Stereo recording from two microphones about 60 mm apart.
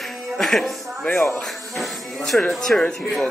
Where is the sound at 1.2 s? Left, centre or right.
Centre.